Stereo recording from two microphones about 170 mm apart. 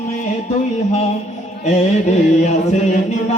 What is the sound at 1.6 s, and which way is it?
Music, 40° left (ahead or behind).